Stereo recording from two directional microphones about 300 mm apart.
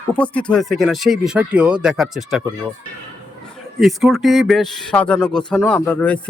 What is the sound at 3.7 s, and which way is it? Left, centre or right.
Speech, centre.